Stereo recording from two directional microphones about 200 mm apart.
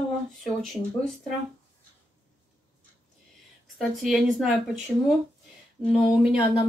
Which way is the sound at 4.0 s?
Centre (ahead or behind).